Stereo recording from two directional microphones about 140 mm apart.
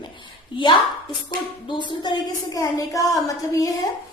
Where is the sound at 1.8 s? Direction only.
35° left (ahead or behind).